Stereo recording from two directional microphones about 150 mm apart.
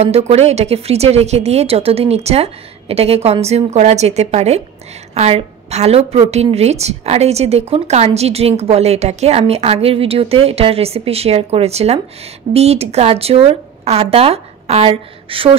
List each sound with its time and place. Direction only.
0.0 s a woman's voice: 45° right (ahead or behind)